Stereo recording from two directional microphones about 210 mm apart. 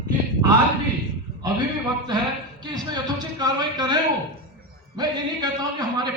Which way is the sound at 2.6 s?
20° right (ahead or behind).